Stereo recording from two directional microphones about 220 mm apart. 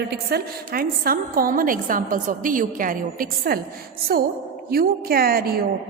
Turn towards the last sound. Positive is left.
turn(degrees=-40)  # may be behind; listen again after turning